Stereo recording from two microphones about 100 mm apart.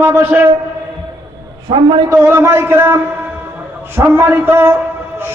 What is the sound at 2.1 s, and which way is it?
A man's voice, 25° right (ahead or behind).